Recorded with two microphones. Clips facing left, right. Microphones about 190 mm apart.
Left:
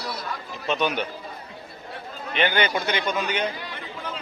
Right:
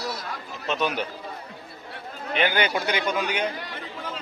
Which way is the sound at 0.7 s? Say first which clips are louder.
Left 2 dB; centre (ahead or behind).